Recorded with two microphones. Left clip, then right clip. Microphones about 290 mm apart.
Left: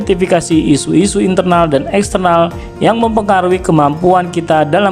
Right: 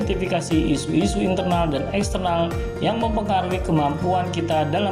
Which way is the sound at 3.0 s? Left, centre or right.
Left.